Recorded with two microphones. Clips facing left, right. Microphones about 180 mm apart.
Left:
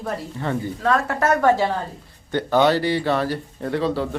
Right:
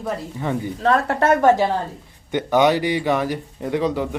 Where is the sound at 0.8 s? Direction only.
30° right (ahead or behind).